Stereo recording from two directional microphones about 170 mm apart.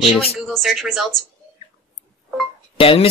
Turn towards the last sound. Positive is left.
turn(degrees=35)  # may be behind; listen again after turning